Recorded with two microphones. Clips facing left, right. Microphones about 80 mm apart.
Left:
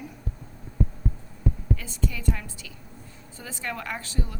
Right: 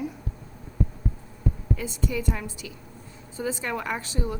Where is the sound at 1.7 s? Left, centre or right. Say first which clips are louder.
Right 4 dB; centre.